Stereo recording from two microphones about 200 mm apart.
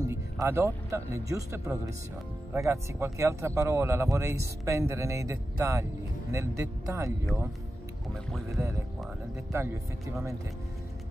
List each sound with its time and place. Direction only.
0.0 s speech: 15° right (ahead or behind)
9.5 s speech: 15° right (ahead or behind)